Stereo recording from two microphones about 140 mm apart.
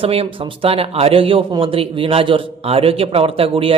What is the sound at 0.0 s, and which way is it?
Speech, 45° right (ahead or behind).